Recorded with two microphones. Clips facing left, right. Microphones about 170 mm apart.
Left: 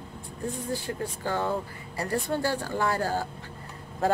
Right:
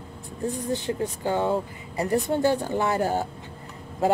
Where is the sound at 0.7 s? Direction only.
20° right (ahead or behind).